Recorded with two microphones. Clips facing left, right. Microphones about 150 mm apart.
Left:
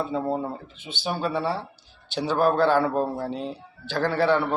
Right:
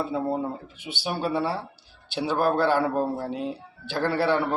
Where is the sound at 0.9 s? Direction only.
10° right (ahead or behind).